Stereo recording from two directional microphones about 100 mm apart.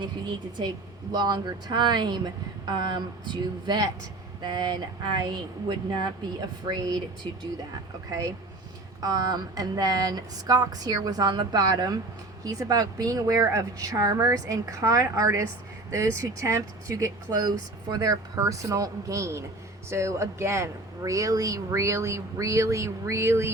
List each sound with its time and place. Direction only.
0.0 s speech: 50° right (ahead or behind)
9.0 s speech: 40° right (ahead or behind)